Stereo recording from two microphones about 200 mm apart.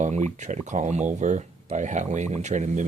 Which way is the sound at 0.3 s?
35° right (ahead or behind).